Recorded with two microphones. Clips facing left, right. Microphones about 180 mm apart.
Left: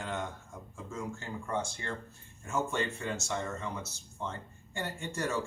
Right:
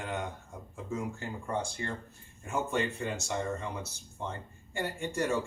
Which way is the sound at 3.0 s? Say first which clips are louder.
Right 1 dB; 15° right (ahead or behind).